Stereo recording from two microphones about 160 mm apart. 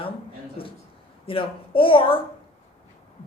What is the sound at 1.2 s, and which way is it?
Speech, 35° left (ahead or behind).